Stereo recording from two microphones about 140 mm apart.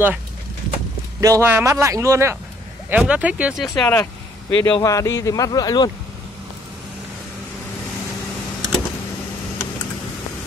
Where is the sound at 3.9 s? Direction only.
20° left (ahead or behind).